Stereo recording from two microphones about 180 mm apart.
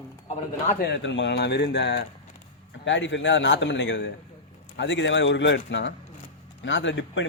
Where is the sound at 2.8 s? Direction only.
90° left.